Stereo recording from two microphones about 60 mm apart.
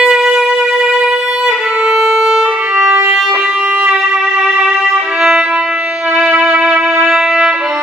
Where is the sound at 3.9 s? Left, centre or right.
Centre.